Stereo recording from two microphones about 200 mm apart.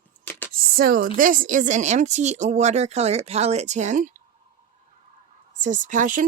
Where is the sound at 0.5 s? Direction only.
45° right (ahead or behind).